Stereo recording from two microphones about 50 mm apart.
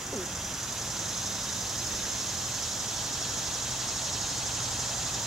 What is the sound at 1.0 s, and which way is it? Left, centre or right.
Vehicle, centre.